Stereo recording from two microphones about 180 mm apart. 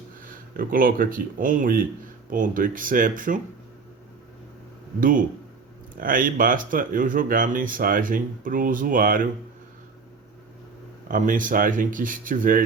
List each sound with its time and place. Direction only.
0.3 s speech: 50° right (ahead or behind)
4.9 s speech: 50° right (ahead or behind)
11.1 s speech: 50° right (ahead or behind)